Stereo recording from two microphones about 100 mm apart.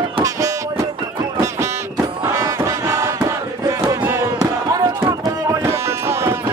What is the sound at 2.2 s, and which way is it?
Music, 35° right (ahead or behind).